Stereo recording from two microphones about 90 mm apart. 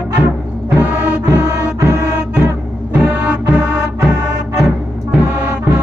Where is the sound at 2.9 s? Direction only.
20° right (ahead or behind).